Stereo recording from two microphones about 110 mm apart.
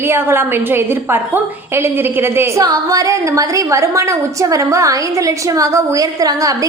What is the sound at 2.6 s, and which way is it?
A woman's voice, 30° right (ahead or behind).